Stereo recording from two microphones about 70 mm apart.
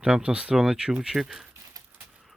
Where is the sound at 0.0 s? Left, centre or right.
Centre.